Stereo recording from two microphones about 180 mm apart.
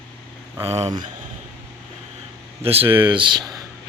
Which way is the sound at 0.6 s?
35° right (ahead or behind).